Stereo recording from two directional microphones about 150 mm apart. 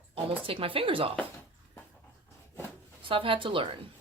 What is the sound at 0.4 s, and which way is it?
Speech, 40° right (ahead or behind).